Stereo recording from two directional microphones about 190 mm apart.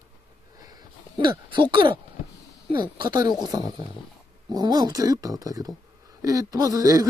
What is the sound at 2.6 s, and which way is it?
A man's voice, 25° right (ahead or behind).